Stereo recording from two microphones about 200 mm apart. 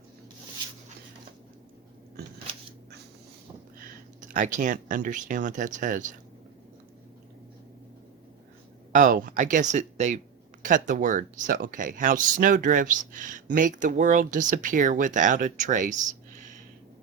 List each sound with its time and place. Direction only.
4.2 s speech: 40° right (ahead or behind)
8.9 s speech: 40° right (ahead or behind)